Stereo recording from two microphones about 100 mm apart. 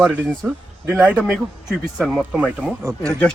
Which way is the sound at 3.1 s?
10° left (ahead or behind).